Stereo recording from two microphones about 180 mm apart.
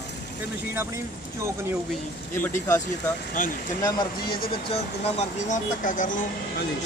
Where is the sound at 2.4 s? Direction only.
10° left (ahead or behind).